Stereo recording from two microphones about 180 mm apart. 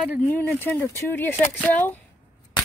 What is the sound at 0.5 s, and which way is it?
Speech, 10° left (ahead or behind).